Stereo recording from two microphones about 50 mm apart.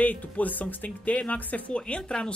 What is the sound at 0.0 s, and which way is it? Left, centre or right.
Speech, left.